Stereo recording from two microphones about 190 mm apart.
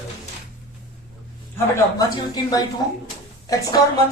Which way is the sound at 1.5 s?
20° left (ahead or behind).